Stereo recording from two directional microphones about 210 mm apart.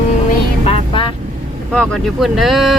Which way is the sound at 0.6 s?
30° left (ahead or behind).